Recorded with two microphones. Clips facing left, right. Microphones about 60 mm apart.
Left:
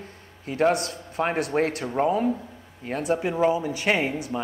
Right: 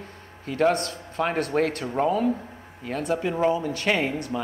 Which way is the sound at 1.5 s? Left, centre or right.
Centre.